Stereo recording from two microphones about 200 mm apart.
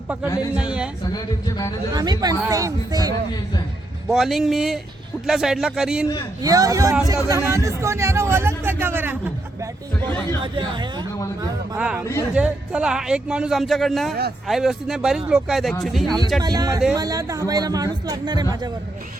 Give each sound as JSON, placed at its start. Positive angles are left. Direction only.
{"t": 0.5, "sound": "speech", "side_deg": -5}
{"t": 1.1, "sound": "speech", "side_deg": 20}
{"t": 2.0, "sound": "speech", "side_deg": -20}
{"t": 4.1, "sound": "speech", "side_deg": 0}
{"t": 6.4, "sound": "speech", "side_deg": -20}
{"t": 10.4, "sound": "speech", "side_deg": -25}
{"t": 11.8, "sound": "speech", "side_deg": -5}
{"t": 16.4, "sound": "speech", "side_deg": -20}